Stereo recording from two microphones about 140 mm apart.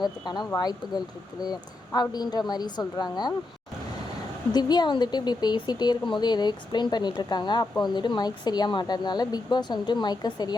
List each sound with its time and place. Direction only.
0.0 s speech: 30° left (ahead or behind)
4.5 s speech: 30° left (ahead or behind)